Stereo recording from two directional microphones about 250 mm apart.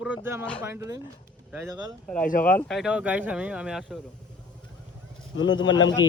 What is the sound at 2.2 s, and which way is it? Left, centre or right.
Speech, left.